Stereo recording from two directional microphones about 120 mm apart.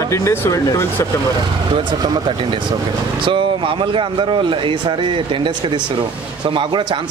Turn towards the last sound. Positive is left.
turn(degrees=-40)  # may be behind; listen again after turning